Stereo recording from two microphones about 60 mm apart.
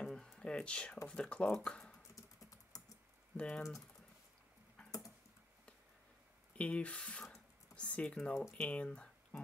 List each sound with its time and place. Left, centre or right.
0.0 s a sound: centre
0.4 s speech: centre
2.1 s typing: left
3.3 s speech: centre
6.5 s speech: left